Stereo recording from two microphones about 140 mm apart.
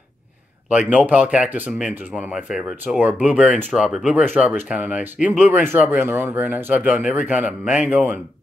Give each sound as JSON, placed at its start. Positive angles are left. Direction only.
{"t": 0.7, "sound": "speech", "side_deg": -10}